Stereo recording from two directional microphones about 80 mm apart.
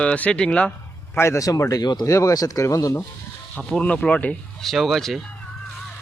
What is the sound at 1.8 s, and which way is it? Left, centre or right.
Speech, left.